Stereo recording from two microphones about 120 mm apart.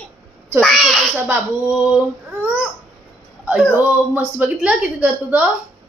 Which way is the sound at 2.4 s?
10° right (ahead or behind).